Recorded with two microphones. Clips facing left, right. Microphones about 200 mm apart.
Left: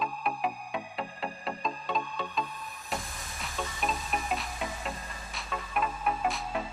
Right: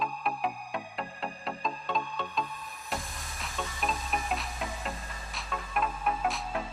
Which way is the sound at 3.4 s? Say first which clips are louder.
Left 1 dB; centre (ahead or behind).